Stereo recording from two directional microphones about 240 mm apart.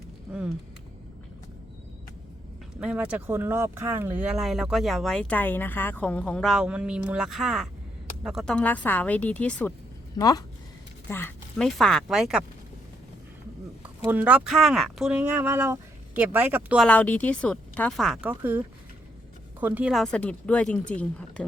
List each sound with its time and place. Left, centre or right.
2.8 s speech: centre
13.8 s speech: centre